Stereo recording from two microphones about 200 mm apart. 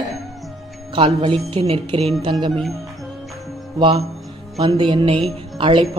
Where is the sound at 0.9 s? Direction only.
25° right (ahead or behind).